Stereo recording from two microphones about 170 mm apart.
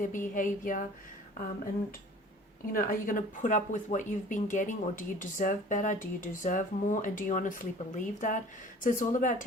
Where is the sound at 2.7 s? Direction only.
55° left (ahead or behind).